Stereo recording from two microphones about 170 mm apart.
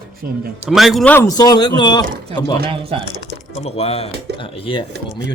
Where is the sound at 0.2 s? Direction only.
60° right (ahead or behind).